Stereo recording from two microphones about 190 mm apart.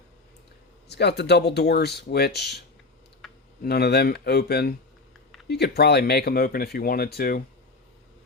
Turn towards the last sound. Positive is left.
turn(degrees=55)  # may be behind; listen again after turning